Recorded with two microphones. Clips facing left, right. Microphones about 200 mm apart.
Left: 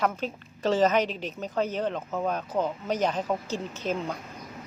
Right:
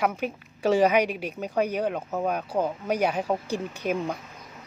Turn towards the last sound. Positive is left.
turn(degrees=-15)  # may be behind; listen again after turning